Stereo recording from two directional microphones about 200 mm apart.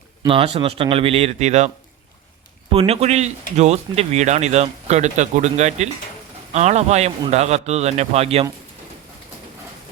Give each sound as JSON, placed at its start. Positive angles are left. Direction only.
{"t": 0.2, "sound": "speech", "side_deg": -25}
{"t": 2.7, "sound": "speech", "side_deg": -30}